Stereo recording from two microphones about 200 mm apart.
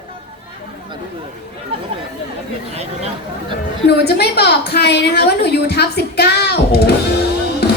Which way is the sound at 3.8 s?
55° left (ahead or behind).